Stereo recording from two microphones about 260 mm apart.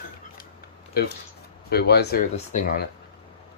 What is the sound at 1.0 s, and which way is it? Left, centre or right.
Speech, left.